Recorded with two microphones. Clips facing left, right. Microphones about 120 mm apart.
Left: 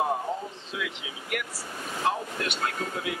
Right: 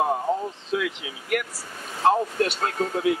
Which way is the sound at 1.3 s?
50° right (ahead or behind).